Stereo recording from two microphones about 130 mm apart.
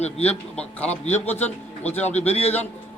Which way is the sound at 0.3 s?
10° left (ahead or behind).